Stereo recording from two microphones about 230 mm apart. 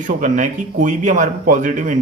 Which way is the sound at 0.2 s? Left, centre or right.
Right.